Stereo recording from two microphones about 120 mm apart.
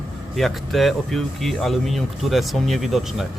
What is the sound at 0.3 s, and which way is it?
Speech, centre (ahead or behind).